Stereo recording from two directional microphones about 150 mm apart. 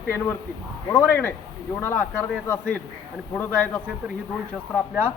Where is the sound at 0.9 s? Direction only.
20° left (ahead or behind).